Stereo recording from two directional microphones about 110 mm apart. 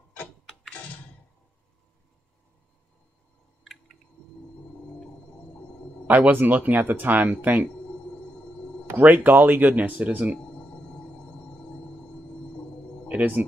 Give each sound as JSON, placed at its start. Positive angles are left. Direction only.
{"t": 0.5, "sound": "a sound", "side_deg": 10}
{"t": 6.0, "sound": "speech", "side_deg": -15}
{"t": 8.9, "sound": "speech", "side_deg": -15}
{"t": 13.1, "sound": "speech", "side_deg": -15}